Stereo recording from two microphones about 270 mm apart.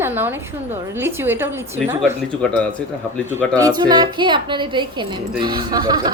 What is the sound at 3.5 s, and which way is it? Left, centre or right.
A woman's voice, centre.